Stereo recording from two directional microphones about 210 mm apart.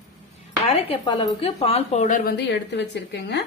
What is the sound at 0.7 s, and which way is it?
A woman's voice, 25° left (ahead or behind).